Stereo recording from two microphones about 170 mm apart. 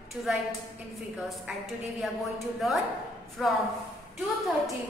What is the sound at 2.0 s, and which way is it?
Speech, centre (ahead or behind).